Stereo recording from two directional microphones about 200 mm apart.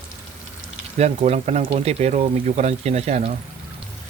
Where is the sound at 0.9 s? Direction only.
30° right (ahead or behind).